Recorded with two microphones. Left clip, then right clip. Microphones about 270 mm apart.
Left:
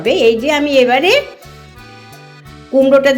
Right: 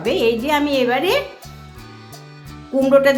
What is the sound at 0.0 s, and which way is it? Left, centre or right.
A woman's voice, centre.